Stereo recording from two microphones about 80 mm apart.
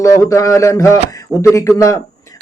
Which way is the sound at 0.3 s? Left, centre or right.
Left.